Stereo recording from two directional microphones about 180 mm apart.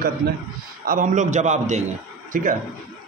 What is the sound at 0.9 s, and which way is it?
Speech, 45° right (ahead or behind).